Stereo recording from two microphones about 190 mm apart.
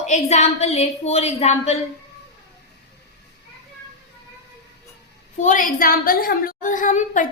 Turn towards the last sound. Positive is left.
turn(degrees=40)  # may be behind; listen again after turning